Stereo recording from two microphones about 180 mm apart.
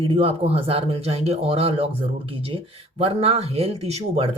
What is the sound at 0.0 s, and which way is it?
Speech, 30° right (ahead or behind).